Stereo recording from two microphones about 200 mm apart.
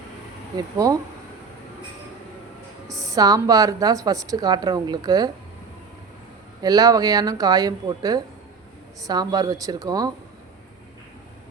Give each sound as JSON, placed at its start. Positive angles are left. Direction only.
{"t": 0.5, "sound": "a woman's voice", "side_deg": -15}
{"t": 2.8, "sound": "a woman's voice", "side_deg": -15}
{"t": 6.6, "sound": "a woman's voice", "side_deg": -20}